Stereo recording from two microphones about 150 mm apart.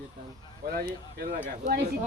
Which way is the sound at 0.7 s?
80° right.